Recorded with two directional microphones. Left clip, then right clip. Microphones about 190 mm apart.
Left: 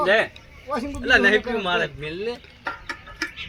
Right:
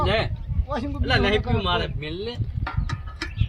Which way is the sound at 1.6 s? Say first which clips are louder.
Left 2 dB; 35° right (ahead or behind).